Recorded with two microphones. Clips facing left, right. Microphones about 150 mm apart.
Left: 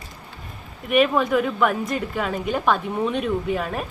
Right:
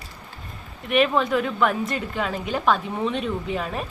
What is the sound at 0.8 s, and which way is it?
A woman's voice, 5° left (ahead or behind).